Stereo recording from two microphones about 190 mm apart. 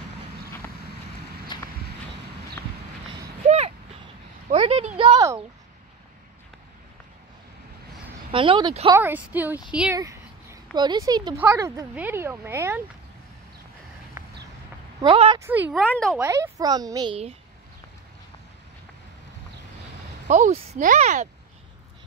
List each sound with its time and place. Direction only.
1.5 s a sound: 25° left (ahead or behind)
3.4 s a sound: 35° right (ahead or behind)
8.3 s speech: 25° right (ahead or behind)
9.0 s speech: 10° right (ahead or behind)
9.9 s a sound: 20° right (ahead or behind)
11.3 s speech: 10° right (ahead or behind)
14.2 s a sound: 15° right (ahead or behind)
15.0 s speech: 30° right (ahead or behind)
15.3 s speech: 10° right (ahead or behind)
15.8 s speech: 5° left (ahead or behind)
16.2 s speech: 15° right (ahead or behind)
20.2 s speech: 40° right (ahead or behind)